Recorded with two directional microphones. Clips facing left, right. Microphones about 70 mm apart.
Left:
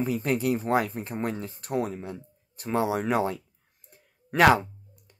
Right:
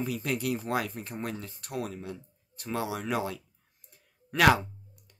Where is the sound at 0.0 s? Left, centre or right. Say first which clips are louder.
Left 5 dB; left.